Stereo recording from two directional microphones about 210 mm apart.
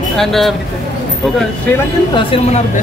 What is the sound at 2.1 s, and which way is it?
Speech, 30° left (ahead or behind).